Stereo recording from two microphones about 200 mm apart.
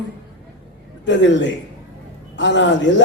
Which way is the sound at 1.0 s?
65° left (ahead or behind).